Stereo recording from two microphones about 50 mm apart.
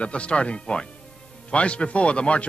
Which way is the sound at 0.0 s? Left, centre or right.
Left.